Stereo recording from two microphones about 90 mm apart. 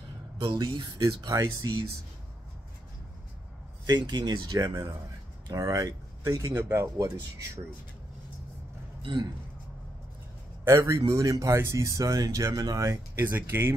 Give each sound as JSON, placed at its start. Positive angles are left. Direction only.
{"t": 0.4, "sound": "speech", "side_deg": -55}
{"t": 1.0, "sound": "speech", "side_deg": -35}
{"t": 3.8, "sound": "speech", "side_deg": -55}
{"t": 5.5, "sound": "speech", "side_deg": -40}
{"t": 6.5, "sound": "speech", "side_deg": -30}
{"t": 10.8, "sound": "speech", "side_deg": -45}
{"t": 13.1, "sound": "speech", "side_deg": -25}